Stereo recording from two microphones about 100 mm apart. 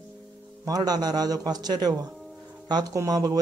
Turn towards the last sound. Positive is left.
turn(degrees=-40)  # may be behind; listen again after turning